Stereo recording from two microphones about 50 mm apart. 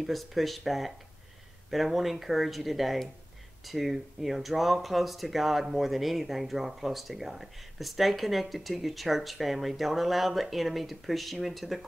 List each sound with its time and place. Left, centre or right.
0.0 s speech: centre